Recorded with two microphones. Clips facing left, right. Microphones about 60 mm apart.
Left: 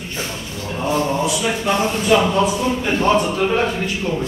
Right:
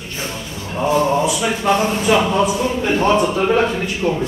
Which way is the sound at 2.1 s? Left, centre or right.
Centre.